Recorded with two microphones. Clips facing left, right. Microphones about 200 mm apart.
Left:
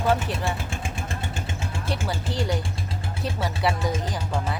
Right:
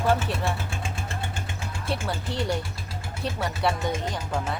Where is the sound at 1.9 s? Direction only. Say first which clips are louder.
Even; centre (ahead or behind).